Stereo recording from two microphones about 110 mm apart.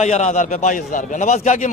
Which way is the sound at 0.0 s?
90° left.